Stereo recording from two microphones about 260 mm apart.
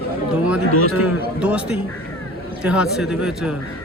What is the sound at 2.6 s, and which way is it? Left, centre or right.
Speech, centre.